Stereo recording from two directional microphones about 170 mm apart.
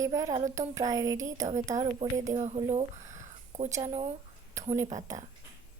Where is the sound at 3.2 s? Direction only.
45° right (ahead or behind).